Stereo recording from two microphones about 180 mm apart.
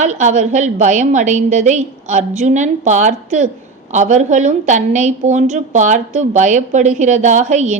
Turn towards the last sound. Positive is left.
turn(degrees=-45)  # may be behind; listen again after turning